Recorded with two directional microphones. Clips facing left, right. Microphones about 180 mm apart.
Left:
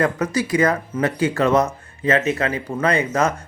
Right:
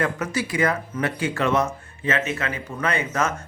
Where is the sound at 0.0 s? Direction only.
40° left (ahead or behind).